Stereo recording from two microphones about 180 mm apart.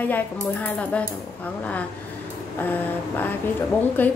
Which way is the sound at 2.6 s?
10° left (ahead or behind).